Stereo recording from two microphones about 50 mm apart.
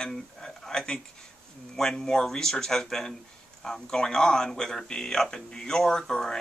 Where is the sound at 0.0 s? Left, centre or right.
Centre.